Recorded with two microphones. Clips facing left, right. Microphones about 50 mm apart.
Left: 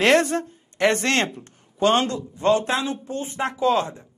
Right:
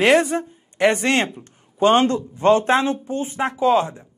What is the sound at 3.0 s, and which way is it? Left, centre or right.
Speech, right.